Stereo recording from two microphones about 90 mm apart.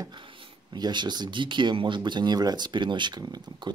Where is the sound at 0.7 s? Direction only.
50° right (ahead or behind).